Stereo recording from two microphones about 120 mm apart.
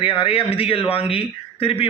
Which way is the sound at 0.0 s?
50° left (ahead or behind).